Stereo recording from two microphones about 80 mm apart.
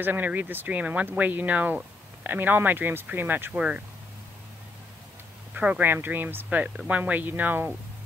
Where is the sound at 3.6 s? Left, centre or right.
Centre.